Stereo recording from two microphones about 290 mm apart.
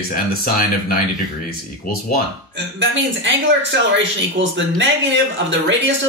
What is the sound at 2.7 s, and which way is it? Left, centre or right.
Speech, right.